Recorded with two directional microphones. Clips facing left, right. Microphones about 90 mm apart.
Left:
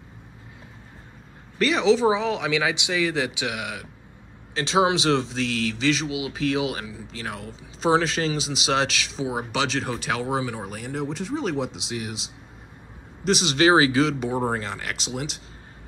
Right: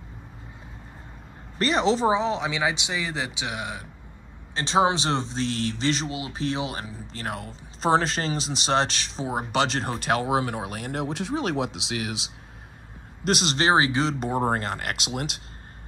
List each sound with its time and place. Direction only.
1.6 s speech: 40° right (ahead or behind)
2.1 s speech: 30° right (ahead or behind)
5.9 s speech: 40° right (ahead or behind)
6.4 s speech: 30° right (ahead or behind); by 11.5 s 65° right (ahead or behind)
11.6 s speech: 90° right
13.2 s speech: 50° right (ahead or behind)
13.6 s speech: 30° right (ahead or behind)
14.5 s speech: 45° right (ahead or behind)